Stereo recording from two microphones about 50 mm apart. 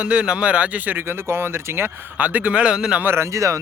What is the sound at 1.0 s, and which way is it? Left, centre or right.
Speech, right.